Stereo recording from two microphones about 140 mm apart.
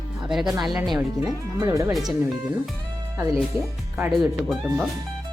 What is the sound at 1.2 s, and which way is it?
Speech, 25° right (ahead or behind).